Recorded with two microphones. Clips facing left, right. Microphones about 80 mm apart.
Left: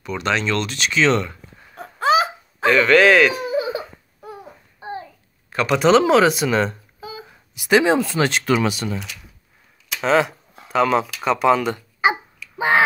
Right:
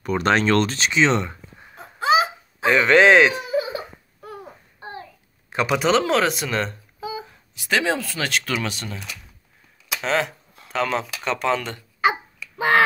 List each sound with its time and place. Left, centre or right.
0.0 s speech: right
0.7 s speech: right
1.8 s a sound: left
2.6 s speech: centre
5.5 s a man's voice: centre
5.8 s speech: centre
7.5 s speech: centre
8.6 s speech: centre
10.0 s speech: centre